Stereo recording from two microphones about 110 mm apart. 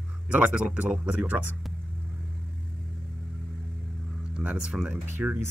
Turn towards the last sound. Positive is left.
turn(degrees=-20)  # may be behind; listen again after turning